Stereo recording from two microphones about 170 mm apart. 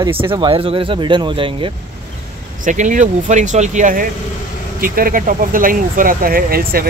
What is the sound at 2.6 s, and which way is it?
Speech, 50° right (ahead or behind).